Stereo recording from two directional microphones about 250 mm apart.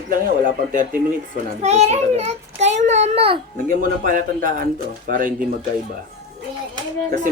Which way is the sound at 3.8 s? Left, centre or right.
Right.